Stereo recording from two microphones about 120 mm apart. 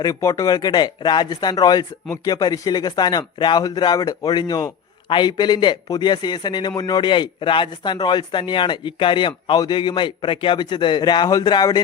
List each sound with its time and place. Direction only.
0.0 s a man's voice: 25° left (ahead or behind)